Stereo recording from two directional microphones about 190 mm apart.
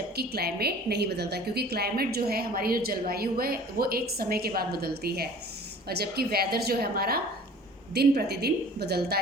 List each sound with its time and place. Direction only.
0.2 s a woman's voice: 55° right (ahead or behind)